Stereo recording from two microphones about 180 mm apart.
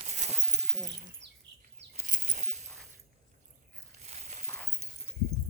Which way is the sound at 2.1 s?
45° right (ahead or behind).